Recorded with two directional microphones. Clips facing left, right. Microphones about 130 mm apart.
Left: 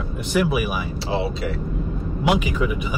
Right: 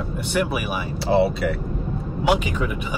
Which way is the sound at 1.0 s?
60° right (ahead or behind).